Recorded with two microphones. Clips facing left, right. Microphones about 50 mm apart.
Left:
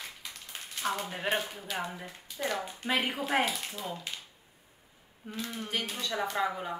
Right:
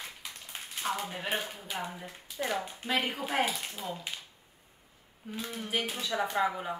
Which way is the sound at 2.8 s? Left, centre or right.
Centre.